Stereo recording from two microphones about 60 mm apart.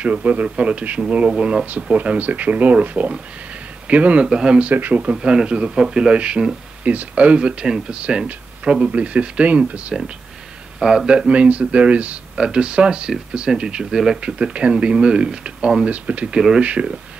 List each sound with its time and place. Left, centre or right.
0.0 s a man's voice: right
10.8 s a man's voice: centre
16.3 s speech: centre
16.6 s a man's voice: right